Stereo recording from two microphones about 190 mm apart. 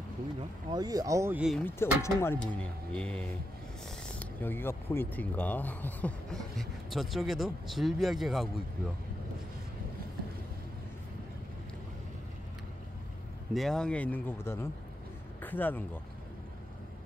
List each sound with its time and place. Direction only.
0.4 s speech: 25° right (ahead or behind); by 1.6 s 5° right (ahead or behind)
1.6 s speech: 10° left (ahead or behind)
13.5 s speech: centre (ahead or behind)